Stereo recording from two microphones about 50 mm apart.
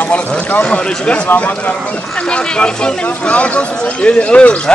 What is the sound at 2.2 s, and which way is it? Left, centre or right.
Speech, centre.